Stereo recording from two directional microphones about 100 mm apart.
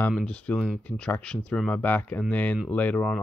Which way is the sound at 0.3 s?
10° left (ahead or behind).